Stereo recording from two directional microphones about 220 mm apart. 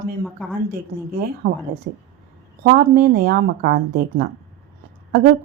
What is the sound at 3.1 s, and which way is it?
Speech, 45° right (ahead or behind).